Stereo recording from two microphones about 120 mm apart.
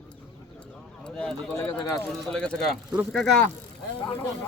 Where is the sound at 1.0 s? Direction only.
5° left (ahead or behind).